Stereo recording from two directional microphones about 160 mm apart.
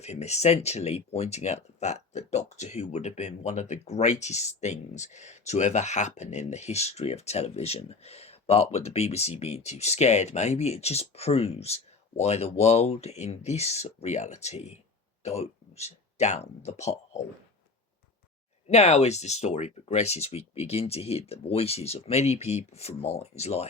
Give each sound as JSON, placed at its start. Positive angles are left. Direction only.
{"t": 0.0, "sound": "speech", "side_deg": 45}
{"t": 18.7, "sound": "speech", "side_deg": 45}